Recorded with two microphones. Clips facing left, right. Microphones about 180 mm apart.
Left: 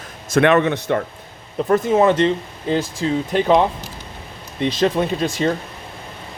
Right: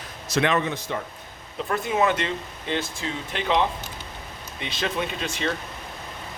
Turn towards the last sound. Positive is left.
turn(degrees=40)  # may be behind; listen again after turning